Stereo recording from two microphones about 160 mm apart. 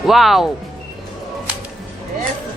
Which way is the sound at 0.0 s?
Centre (ahead or behind).